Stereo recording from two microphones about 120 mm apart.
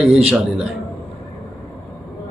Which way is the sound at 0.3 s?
5° right (ahead or behind).